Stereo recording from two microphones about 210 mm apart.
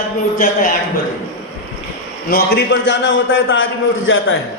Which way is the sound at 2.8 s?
60° left (ahead or behind).